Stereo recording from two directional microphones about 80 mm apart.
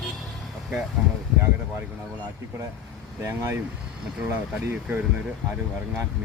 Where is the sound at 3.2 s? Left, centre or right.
Right.